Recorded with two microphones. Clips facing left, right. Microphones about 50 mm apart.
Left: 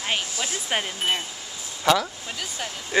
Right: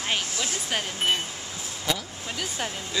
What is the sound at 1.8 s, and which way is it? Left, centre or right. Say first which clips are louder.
Speech: left 9 dB; left.